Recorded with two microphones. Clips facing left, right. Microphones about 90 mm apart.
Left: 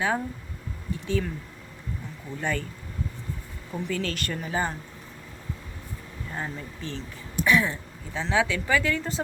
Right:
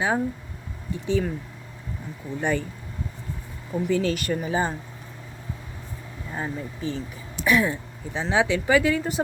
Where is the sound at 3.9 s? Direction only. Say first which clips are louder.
Right 7 dB; 15° right (ahead or behind).